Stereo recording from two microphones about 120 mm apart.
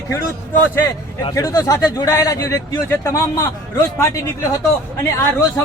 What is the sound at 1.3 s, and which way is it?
A man's voice, 30° left (ahead or behind).